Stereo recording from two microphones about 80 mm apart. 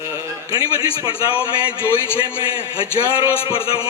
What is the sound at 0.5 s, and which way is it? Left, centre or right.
Speech, right.